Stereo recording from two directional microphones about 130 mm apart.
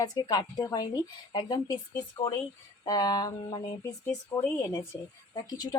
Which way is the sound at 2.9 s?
30° left (ahead or behind).